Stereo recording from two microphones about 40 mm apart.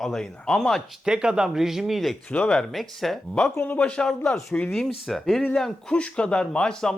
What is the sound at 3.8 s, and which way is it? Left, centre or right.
Speech, left.